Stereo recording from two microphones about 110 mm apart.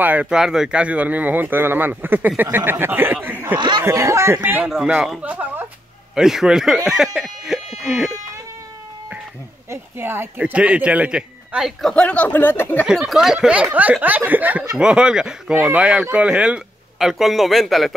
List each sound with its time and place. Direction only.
0.0 s speech: 15° right (ahead or behind)
3.5 s speech: 45° right (ahead or behind)
3.8 s speech: 25° right (ahead or behind)
4.4 s speech: 15° right (ahead or behind)
4.7 s speech: 5° right (ahead or behind)
5.2 s speech: 15° right (ahead or behind); by 8.1 s centre (ahead or behind)
9.7 s speech: 20° right (ahead or behind)
10.4 s speech: 10° right (ahead or behind)
11.8 s speech: 10° left (ahead or behind)
12.8 s speech: 5° right (ahead or behind)